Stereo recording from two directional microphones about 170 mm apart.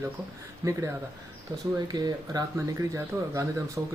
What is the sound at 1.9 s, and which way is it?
Speech, 25° right (ahead or behind).